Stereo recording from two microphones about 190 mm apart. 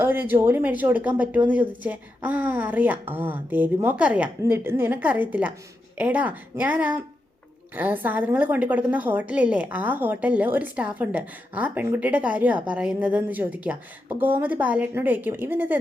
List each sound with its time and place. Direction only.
0.0 s a woman's voice: 10° right (ahead or behind)